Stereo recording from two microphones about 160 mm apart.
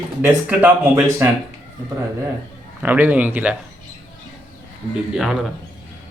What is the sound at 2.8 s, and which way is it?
Speech, 10° right (ahead or behind).